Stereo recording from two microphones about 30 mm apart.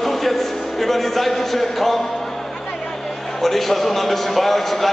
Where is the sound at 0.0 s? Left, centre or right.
Centre.